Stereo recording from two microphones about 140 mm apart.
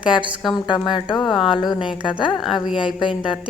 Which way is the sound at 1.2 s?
Centre (ahead or behind).